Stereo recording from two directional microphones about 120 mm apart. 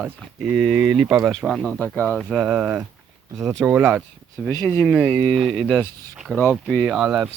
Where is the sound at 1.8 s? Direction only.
10° left (ahead or behind).